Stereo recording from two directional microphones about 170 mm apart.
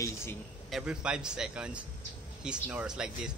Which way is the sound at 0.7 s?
5° right (ahead or behind).